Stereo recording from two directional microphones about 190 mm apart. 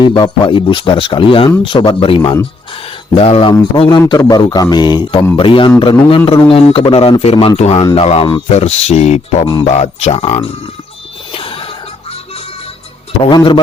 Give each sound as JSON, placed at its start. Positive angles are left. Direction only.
{"t": 0.0, "sound": "speech", "side_deg": 25}
{"t": 11.3, "sound": "a sound", "side_deg": 30}
{"t": 13.2, "sound": "speech", "side_deg": 25}